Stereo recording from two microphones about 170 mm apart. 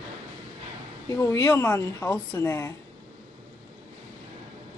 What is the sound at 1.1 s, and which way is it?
A woman's voice, 15° left (ahead or behind).